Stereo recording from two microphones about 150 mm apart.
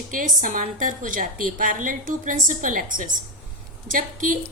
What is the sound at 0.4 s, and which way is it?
A woman's voice, 60° right (ahead or behind).